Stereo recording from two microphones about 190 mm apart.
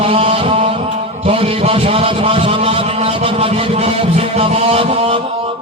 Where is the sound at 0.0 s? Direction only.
30° right (ahead or behind).